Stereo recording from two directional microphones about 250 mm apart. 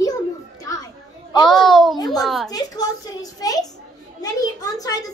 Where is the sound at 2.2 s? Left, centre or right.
Centre.